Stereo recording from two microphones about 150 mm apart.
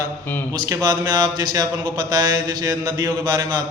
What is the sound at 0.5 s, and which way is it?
Speech, 25° right (ahead or behind).